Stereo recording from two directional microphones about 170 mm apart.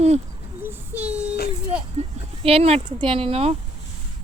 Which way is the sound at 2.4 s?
35° right (ahead or behind).